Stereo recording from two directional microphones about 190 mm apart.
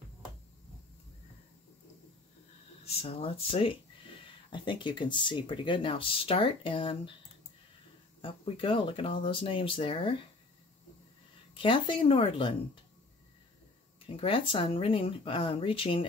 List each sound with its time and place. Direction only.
2.8 s speech: 30° left (ahead or behind)
8.2 s speech: 30° left (ahead or behind)
11.5 s speech: 25° left (ahead or behind)
14.0 s speech: 30° left (ahead or behind)